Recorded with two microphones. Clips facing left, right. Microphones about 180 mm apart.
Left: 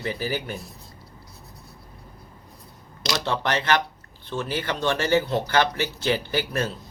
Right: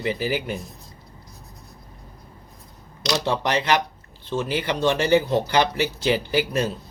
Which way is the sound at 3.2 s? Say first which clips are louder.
Right 1 dB; 15° right (ahead or behind).